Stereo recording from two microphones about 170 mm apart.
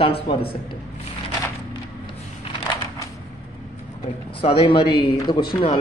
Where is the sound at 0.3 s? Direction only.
30° left (ahead or behind).